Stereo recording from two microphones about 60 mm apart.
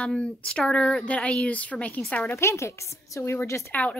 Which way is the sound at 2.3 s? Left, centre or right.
Left.